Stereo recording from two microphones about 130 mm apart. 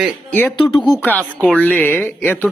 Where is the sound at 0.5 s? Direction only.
40° left (ahead or behind).